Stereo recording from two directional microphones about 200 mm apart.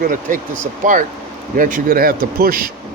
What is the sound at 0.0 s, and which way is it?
Speech, 40° right (ahead or behind).